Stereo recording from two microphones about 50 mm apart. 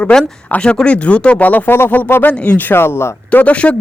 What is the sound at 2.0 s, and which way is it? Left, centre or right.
Speech, left.